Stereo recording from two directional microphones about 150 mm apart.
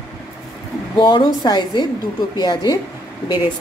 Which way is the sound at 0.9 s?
35° left (ahead or behind).